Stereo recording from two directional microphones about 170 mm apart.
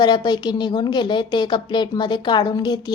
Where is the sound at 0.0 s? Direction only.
25° left (ahead or behind).